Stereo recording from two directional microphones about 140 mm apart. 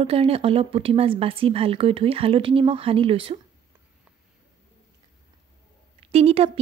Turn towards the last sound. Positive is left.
turn(degrees=-45)  # may be behind; listen again after turning